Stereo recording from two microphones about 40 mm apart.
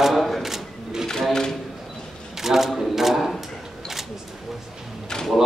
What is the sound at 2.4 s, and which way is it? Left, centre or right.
Shuffling cards, centre.